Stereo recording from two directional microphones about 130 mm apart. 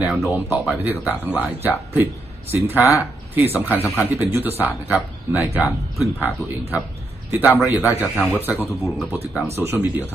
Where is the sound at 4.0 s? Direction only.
15° right (ahead or behind).